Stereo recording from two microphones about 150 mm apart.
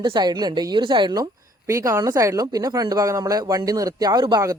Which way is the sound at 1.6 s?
20° right (ahead or behind).